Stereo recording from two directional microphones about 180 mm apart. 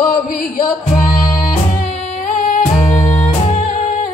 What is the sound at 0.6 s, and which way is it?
Music, 50° left (ahead or behind).